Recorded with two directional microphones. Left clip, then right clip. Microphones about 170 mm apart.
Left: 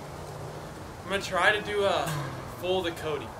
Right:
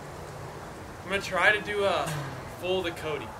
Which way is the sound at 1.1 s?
5° left (ahead or behind).